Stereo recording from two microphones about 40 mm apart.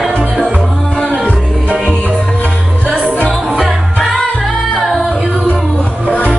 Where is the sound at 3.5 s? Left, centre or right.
Centre.